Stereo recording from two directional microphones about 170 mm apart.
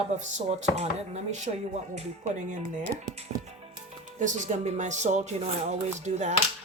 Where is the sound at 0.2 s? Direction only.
40° right (ahead or behind).